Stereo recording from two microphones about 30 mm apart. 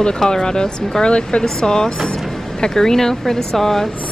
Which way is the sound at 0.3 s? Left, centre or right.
Left.